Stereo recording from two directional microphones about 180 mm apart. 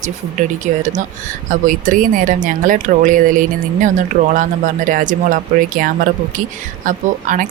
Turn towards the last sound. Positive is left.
turn(degrees=-45)  # may be behind; listen again after turning